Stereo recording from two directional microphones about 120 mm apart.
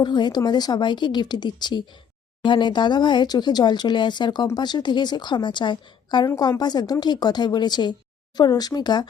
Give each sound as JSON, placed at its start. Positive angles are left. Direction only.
{"t": 0.0, "sound": "a woman's voice", "side_deg": 35}